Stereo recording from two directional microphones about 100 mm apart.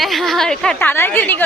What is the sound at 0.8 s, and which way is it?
Speech, 20° left (ahead or behind).